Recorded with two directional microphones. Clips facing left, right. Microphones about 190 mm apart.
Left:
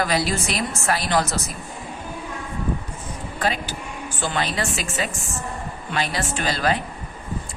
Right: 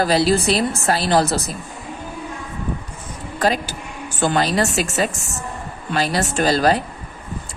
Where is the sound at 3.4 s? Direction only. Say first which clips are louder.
Right 5 dB; 40° right (ahead or behind).